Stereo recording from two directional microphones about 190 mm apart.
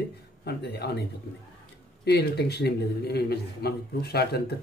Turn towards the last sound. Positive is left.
turn(degrees=55)  # may be behind; listen again after turning